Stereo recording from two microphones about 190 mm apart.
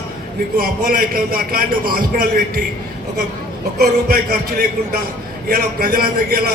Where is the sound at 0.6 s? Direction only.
50° right (ahead or behind).